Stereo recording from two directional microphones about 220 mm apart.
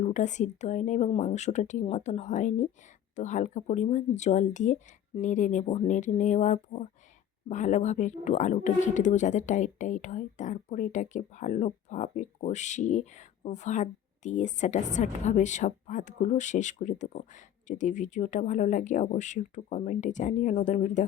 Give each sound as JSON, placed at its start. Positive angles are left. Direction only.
{"t": 0.0, "sound": "speech", "side_deg": 35}